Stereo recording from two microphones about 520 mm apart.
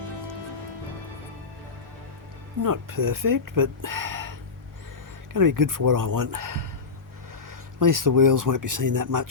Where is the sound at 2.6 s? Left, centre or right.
Right.